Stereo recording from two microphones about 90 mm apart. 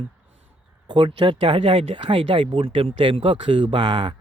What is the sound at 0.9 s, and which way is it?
A man's voice, 65° right (ahead or behind).